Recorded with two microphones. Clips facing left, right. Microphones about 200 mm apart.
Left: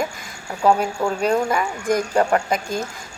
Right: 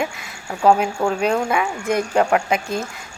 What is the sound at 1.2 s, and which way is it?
A woman's voice, 5° right (ahead or behind).